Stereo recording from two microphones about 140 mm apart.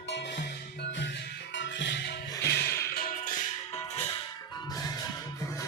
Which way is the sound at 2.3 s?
20° left (ahead or behind).